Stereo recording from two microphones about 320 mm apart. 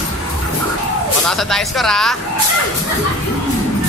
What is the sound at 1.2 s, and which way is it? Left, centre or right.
Speech, centre.